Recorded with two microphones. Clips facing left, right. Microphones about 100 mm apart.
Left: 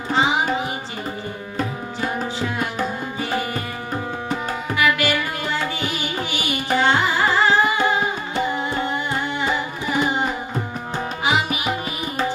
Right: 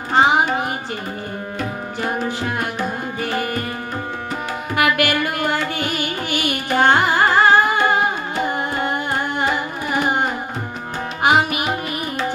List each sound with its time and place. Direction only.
0.1 s tabla: 55° right (ahead or behind)
2.0 s tabla: 50° right (ahead or behind)
3.2 s music: 55° right (ahead or behind)
4.7 s music: 55° right (ahead or behind)